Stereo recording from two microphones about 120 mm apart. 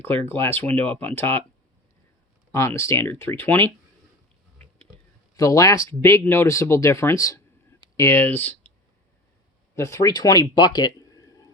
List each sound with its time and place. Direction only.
0.0 s speech: 20° left (ahead or behind)
2.5 s speech: 25° left (ahead or behind)
4.5 s a sound: 10° left (ahead or behind)
5.3 s speech: 30° left (ahead or behind)
9.7 s speech: 25° left (ahead or behind)
10.5 s a sound: 35° left (ahead or behind)